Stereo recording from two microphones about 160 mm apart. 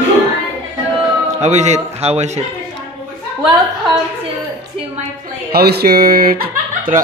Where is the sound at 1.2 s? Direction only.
45° right (ahead or behind).